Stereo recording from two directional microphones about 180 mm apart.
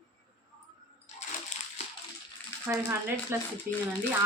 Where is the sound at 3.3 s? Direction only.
15° right (ahead or behind).